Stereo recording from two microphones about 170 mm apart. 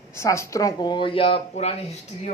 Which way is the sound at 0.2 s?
15° left (ahead or behind).